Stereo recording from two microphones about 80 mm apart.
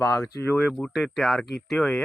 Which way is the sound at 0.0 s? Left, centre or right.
Left.